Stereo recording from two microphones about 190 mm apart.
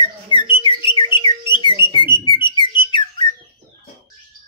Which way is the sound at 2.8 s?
25° left (ahead or behind).